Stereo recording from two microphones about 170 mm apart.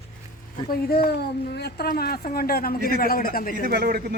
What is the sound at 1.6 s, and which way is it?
A man's voice, 65° left (ahead or behind).